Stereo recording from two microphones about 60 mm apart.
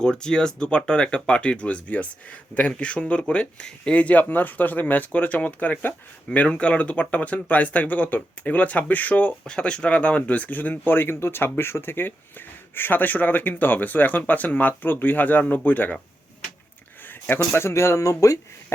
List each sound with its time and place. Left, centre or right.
0.0 s speech: centre; by 9.3 s left
9.5 s speech: centre
17.1 s speech: left